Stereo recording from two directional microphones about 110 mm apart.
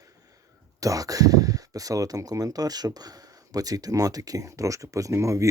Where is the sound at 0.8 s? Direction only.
30° right (ahead or behind).